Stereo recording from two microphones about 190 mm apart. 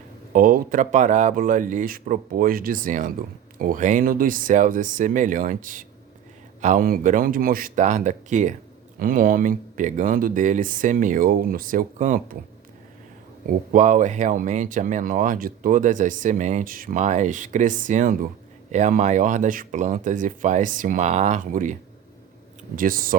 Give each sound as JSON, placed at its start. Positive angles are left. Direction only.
{"t": 0.3, "sound": "speech", "side_deg": -45}
{"t": 13.5, "sound": "speech", "side_deg": -40}